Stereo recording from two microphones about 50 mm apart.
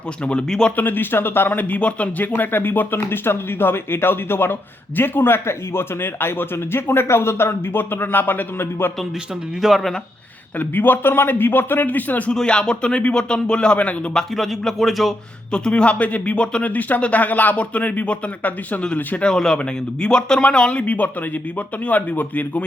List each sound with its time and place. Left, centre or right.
0.8 s speech: left
2.4 s a man's voice: left
9.6 s speech: centre
10.6 s speech: left
12.3 s speech: centre
14.3 s speech: centre
15.5 s speech: centre
19.2 s speech: centre; by 22.6 s left